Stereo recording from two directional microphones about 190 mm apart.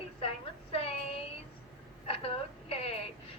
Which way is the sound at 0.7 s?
30° left (ahead or behind).